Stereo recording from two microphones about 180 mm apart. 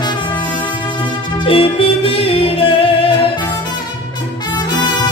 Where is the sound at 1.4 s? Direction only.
30° left (ahead or behind).